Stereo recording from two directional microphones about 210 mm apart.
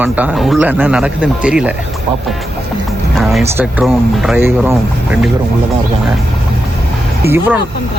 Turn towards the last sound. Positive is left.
turn(degrees=-10)  # may be behind; listen again after turning